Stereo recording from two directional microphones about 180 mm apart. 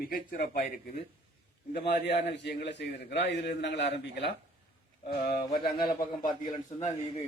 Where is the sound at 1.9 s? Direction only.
70° left (ahead or behind).